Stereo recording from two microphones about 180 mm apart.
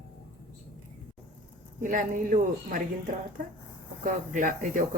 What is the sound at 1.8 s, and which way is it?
Speech, 50° right (ahead or behind).